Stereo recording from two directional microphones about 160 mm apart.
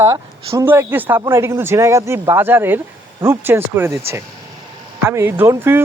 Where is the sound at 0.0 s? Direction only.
25° right (ahead or behind).